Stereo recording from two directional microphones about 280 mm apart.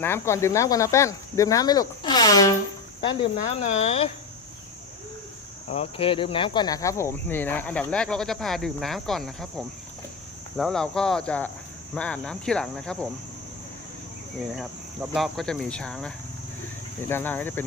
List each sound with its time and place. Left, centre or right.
0.0 s speech: centre
5.6 s speech: left; by 13.1 s centre
15.1 s speech: centre